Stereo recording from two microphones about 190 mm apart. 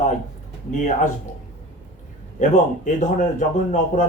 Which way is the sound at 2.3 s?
40° left (ahead or behind).